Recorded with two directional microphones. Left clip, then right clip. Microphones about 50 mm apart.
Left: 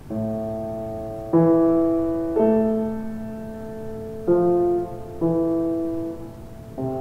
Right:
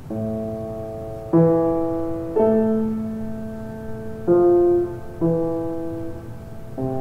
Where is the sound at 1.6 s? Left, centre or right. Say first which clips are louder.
Left 2 dB; centre.